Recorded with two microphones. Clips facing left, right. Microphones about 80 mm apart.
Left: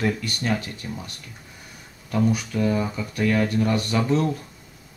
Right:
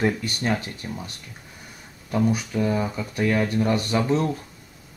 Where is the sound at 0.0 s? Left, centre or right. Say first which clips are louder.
Right 1 dB; right.